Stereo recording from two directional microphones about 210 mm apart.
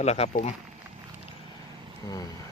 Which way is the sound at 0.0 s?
30° left (ahead or behind).